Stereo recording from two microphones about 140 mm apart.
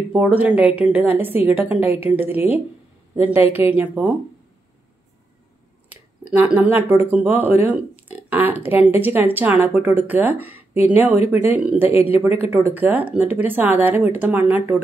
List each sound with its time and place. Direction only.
0.1 s speech: 10° right (ahead or behind)
5.9 s speech: 10° right (ahead or behind)